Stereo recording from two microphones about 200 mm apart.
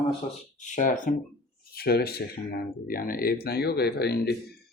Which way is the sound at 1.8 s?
50° left (ahead or behind).